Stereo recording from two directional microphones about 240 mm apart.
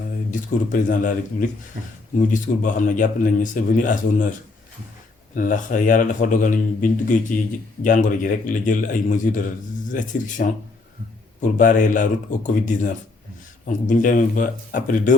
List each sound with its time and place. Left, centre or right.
0.3 s speech: left